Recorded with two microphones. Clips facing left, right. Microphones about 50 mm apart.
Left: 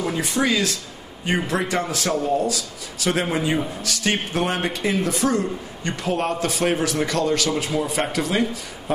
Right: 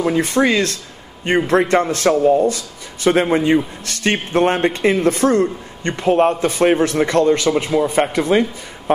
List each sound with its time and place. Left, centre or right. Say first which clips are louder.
0.2 s speech: right 3 dB; right
5.9 s speech: right 9 dB; right